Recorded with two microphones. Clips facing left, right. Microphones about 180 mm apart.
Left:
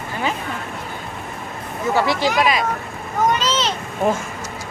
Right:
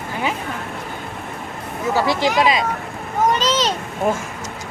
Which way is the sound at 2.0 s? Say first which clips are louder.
Right 1 dB; 20° right (ahead or behind).